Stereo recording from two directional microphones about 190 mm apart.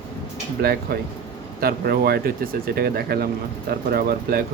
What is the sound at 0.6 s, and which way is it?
Speech, 55° right (ahead or behind).